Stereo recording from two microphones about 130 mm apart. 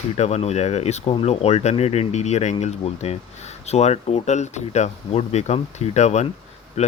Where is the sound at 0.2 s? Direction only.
55° left (ahead or behind).